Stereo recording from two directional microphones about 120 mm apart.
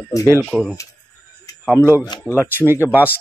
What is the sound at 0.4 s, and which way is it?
Speech, 10° left (ahead or behind).